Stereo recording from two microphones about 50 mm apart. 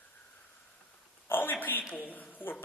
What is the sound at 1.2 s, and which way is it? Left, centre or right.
A man's voice, left.